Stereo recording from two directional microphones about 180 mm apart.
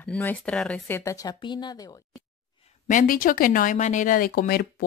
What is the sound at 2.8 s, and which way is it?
Speech, 50° left (ahead or behind).